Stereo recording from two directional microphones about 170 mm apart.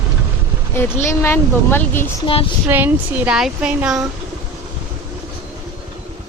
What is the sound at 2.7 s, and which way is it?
Speech, 10° right (ahead or behind).